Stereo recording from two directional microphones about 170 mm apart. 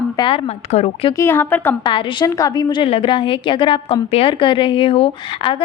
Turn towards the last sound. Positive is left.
turn(degrees=30)  # may be behind; listen again after turning